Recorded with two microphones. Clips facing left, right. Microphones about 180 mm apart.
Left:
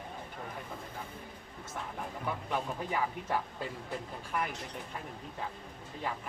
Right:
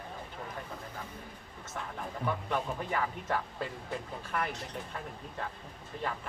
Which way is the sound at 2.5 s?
10° left (ahead or behind).